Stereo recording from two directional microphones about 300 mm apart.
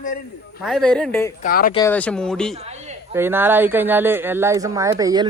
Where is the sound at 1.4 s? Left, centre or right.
Left.